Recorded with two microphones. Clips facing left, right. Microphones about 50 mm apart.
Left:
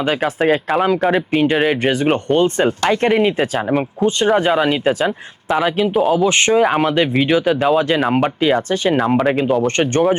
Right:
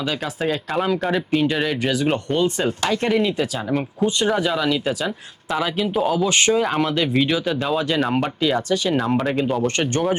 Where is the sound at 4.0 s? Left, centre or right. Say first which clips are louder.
Left 3 dB; centre.